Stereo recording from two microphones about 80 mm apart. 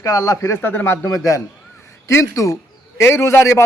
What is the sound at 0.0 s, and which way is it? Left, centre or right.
Speech, left.